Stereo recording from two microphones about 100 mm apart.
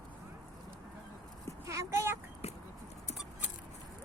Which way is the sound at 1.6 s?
30° right (ahead or behind).